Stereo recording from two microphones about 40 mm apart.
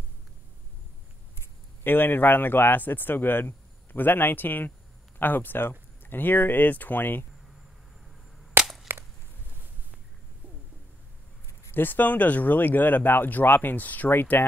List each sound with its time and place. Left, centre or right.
1.8 s a man's voice: left
8.9 s a sound: right
11.7 s a man's voice: left